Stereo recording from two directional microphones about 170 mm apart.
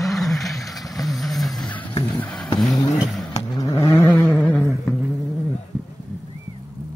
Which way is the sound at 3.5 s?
20° left (ahead or behind).